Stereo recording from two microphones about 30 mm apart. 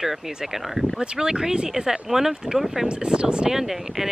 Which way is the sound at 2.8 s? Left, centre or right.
Right.